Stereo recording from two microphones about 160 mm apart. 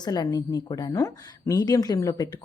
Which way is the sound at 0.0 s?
25° left (ahead or behind).